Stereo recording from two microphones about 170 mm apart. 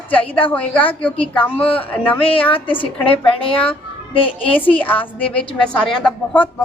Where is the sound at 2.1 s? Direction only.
30° left (ahead or behind).